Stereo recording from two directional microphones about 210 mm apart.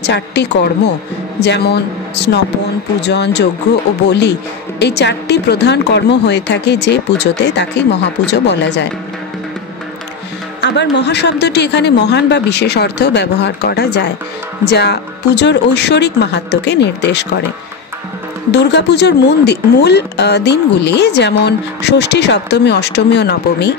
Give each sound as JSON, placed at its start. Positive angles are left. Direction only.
{"t": 0.0, "sound": "speech", "side_deg": 55}
{"t": 10.6, "sound": "speech", "side_deg": 55}
{"t": 18.5, "sound": "speech", "side_deg": 55}